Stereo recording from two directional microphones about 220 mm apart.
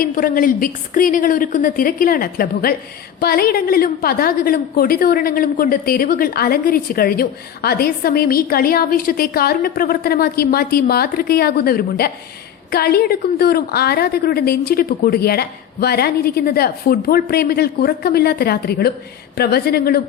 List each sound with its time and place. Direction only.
0.0 s a woman's voice: 40° left (ahead or behind)